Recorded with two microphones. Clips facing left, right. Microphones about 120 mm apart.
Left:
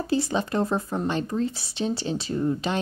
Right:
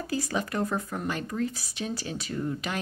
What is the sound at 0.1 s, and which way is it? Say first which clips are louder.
Speech: left 5 dB; 25° left (ahead or behind).